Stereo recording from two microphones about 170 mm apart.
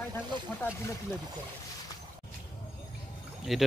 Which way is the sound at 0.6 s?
15° left (ahead or behind).